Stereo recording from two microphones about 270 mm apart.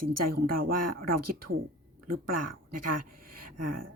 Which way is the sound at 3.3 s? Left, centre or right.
Right.